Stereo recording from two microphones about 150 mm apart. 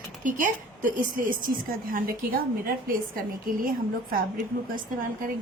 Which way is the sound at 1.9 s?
70° right (ahead or behind).